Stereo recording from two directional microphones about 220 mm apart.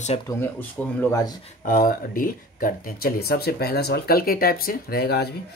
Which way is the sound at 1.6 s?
40° left (ahead or behind).